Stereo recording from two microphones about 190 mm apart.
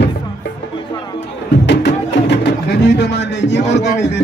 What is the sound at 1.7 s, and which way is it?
Speech, 70° left (ahead or behind).